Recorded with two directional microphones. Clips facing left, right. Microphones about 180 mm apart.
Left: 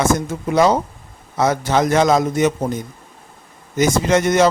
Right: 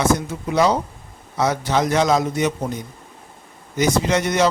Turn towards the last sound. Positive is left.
turn(degrees=50)  # may be behind; listen again after turning